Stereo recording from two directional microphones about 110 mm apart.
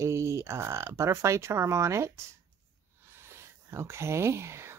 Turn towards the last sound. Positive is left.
turn(degrees=-25)  # may be behind; listen again after turning